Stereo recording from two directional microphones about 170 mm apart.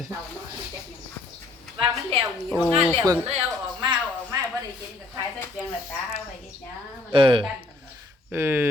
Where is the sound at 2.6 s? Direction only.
5° left (ahead or behind).